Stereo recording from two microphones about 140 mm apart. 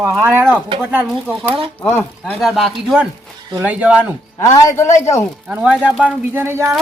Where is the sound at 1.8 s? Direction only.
15° left (ahead or behind).